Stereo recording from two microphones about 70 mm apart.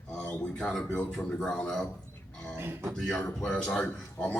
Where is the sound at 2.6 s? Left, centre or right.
Right.